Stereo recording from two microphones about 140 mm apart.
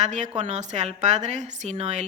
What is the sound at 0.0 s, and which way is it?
A woman's voice, 55° right (ahead or behind).